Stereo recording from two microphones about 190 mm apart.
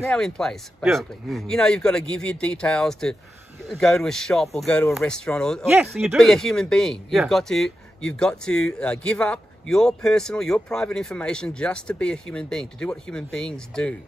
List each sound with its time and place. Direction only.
0.0 s speech: 5° left (ahead or behind)
5.7 s speech: 10° right (ahead or behind)